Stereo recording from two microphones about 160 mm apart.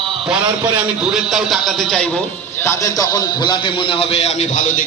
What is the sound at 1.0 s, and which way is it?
A man's voice, 5° right (ahead or behind).